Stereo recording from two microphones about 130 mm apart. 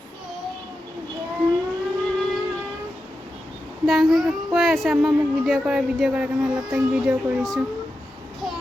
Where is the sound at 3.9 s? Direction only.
Centre (ahead or behind).